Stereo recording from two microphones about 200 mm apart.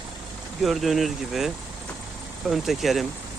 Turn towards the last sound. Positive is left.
turn(degrees=0)  # may be behind; listen again after turning